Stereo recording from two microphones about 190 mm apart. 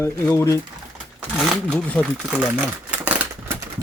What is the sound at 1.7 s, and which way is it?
Speech, 5° left (ahead or behind).